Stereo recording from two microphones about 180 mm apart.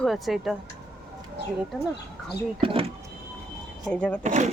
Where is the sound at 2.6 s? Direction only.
30° right (ahead or behind).